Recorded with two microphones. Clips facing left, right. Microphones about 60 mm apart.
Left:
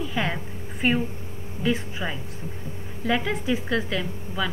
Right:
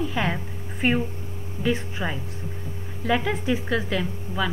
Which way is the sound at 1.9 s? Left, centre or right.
Centre.